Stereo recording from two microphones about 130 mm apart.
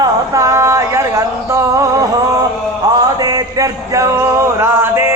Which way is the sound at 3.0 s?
30° right (ahead or behind).